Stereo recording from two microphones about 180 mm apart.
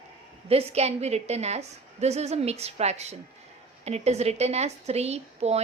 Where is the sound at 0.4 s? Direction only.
35° right (ahead or behind).